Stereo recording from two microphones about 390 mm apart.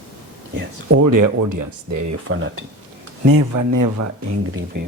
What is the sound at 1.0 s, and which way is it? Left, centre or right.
Speech, right.